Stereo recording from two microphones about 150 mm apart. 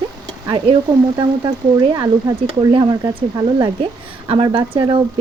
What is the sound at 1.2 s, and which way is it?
Speech, 30° right (ahead or behind).